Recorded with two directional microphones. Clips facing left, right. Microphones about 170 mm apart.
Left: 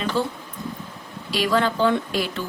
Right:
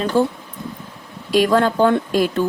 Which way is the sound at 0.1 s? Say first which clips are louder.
Right 7 dB; 45° right (ahead or behind).